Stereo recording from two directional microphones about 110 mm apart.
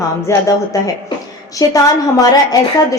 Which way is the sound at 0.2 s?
30° left (ahead or behind).